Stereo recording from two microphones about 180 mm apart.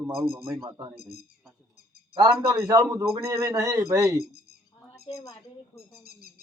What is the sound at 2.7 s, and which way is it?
Speech, 20° right (ahead or behind).